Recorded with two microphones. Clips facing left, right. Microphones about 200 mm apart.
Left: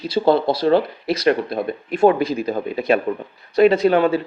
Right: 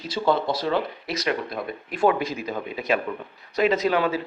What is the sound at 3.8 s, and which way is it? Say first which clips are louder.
Speech: left 7 dB; 50° left (ahead or behind).